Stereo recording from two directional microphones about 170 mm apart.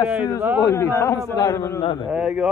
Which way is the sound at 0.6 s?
15° left (ahead or behind).